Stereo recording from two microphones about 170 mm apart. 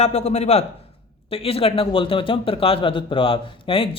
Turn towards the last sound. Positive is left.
turn(degrees=30)  # may be behind; listen again after turning